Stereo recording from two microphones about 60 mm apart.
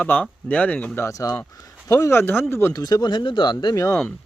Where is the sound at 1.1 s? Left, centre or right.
Left.